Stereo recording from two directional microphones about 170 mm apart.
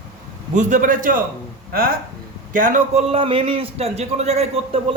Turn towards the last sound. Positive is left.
turn(degrees=-35)  # may be behind; listen again after turning